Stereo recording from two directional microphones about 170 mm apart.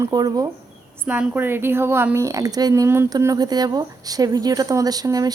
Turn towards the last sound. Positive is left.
turn(degrees=-20)  # may be behind; listen again after turning